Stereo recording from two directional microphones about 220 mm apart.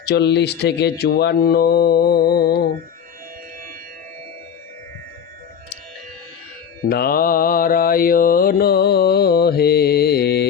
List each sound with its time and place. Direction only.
0.0 s mantra: 50° left (ahead or behind)
6.8 s mantra: 45° left (ahead or behind)